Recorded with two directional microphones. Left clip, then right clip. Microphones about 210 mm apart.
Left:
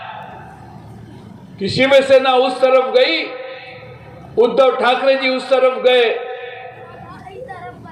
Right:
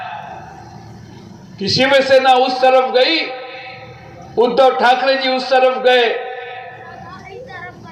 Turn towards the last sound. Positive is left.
turn(degrees=-30)  # may be behind; listen again after turning